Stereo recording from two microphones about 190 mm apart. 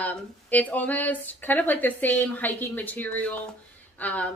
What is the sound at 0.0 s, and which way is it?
A woman's voice, 10° left (ahead or behind).